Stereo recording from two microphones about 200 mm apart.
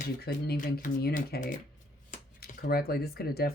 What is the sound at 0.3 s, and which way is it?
Speech, 45° left (ahead or behind).